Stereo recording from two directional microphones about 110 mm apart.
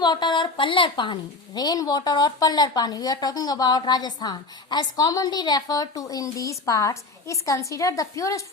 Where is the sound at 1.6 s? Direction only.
35° left (ahead or behind).